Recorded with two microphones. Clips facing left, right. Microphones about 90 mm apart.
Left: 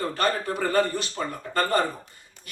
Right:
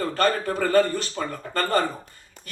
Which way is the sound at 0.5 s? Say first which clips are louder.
Right 3 dB; 15° left (ahead or behind).